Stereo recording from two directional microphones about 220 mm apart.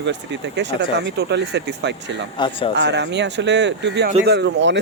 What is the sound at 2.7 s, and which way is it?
Speech, 55° right (ahead or behind).